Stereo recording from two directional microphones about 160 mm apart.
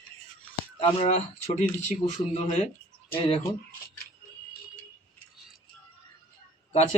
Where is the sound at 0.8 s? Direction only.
40° left (ahead or behind).